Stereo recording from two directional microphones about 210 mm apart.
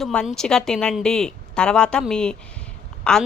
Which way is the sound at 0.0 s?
5° left (ahead or behind).